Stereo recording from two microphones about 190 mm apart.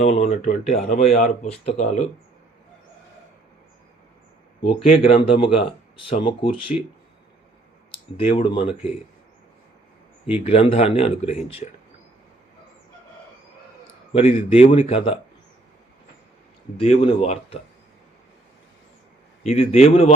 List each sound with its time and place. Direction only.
0.0 s speech: 35° left (ahead or behind)
4.6 s speech: 30° left (ahead or behind)
8.1 s speech: 30° left (ahead or behind)
10.3 s speech: 30° left (ahead or behind)
14.1 s speech: 30° left (ahead or behind)
16.7 s speech: 30° left (ahead or behind)
19.5 s speech: 35° left (ahead or behind)